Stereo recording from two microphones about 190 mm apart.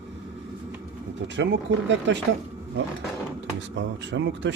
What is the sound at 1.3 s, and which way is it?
Speech, 70° right (ahead or behind).